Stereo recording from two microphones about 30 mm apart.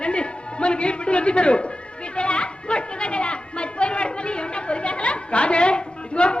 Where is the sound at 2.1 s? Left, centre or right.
Left.